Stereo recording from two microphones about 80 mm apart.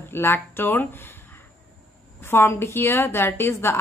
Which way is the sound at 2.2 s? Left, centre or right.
Left.